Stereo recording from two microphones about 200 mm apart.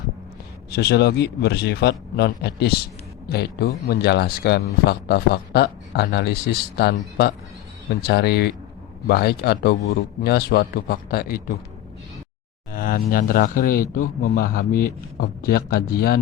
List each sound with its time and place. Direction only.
0.7 s speech: 55° left (ahead or behind)
12.7 s speech: 45° left (ahead or behind)